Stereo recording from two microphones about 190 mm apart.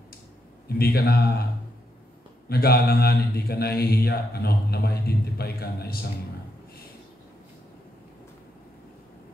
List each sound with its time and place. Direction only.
0.7 s a man's voice: 55° left (ahead or behind)
2.5 s a man's voice: 55° left (ahead or behind)